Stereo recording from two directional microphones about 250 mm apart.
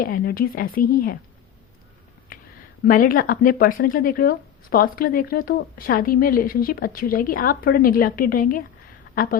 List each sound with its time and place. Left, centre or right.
0.0 s speech: left
2.8 s a woman's voice: left